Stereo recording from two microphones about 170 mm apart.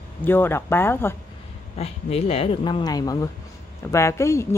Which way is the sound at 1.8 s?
35° left (ahead or behind).